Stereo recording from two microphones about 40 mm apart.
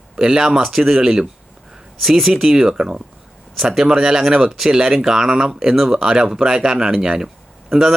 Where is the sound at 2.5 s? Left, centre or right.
Right.